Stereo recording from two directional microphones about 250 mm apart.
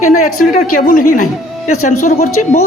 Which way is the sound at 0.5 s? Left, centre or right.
Left.